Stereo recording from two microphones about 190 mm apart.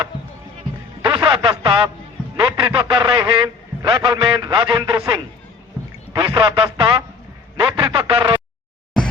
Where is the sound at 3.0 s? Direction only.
25° right (ahead or behind).